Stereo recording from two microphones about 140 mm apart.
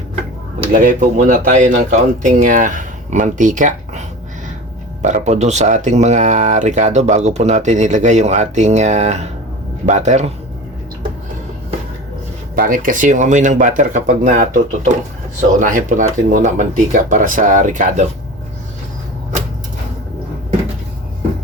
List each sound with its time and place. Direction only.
0.7 s speech: 70° right (ahead or behind)
5.0 s speech: 55° right (ahead or behind)
12.5 s speech: 80° right; by 18.1 s 60° right (ahead or behind)